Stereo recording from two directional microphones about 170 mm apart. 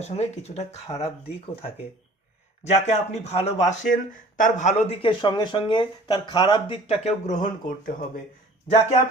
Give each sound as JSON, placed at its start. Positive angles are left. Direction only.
{"t": 0.0, "sound": "speech", "side_deg": 40}
{"t": 2.6, "sound": "speech", "side_deg": 40}